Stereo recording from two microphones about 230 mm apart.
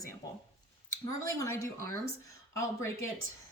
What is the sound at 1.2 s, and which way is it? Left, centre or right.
Speech, centre.